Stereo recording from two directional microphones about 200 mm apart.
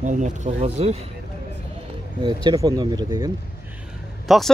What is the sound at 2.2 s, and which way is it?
Speech, 20° right (ahead or behind).